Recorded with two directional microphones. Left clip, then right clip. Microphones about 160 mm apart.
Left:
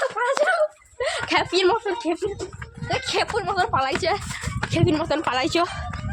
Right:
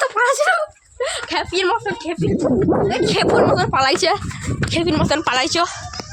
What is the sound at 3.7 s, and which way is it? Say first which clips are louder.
Speech: right 6 dB; 65° right (ahead or behind).